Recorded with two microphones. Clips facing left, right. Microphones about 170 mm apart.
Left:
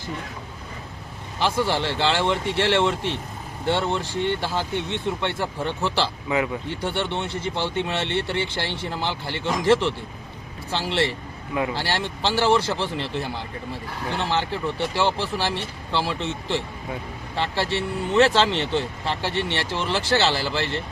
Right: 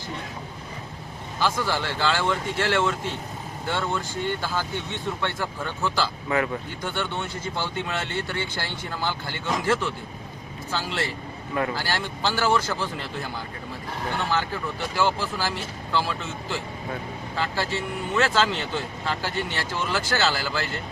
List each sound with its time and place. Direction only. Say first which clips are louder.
1.4 s speech: left 3 dB; 25° left (ahead or behind)
6.2 s speech: left 1 dB; 15° left (ahead or behind)